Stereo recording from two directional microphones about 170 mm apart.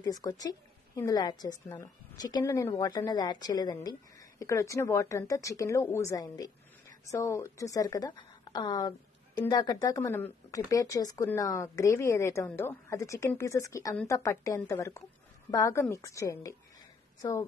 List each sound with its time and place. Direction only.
0.0 s a woman's voice: 20° left (ahead or behind)